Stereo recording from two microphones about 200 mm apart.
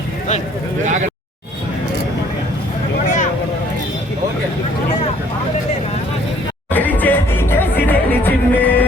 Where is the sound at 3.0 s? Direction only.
40° left (ahead or behind).